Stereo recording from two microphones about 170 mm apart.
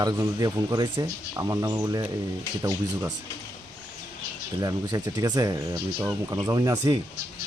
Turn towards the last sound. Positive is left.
turn(degrees=-20)  # may be behind; listen again after turning